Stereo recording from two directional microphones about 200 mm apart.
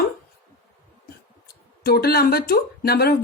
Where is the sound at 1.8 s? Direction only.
50° left (ahead or behind).